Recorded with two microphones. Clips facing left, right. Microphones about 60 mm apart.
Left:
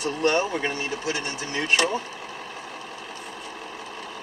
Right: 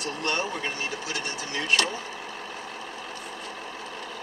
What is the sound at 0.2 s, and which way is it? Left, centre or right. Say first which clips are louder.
Speech: left 6 dB; left.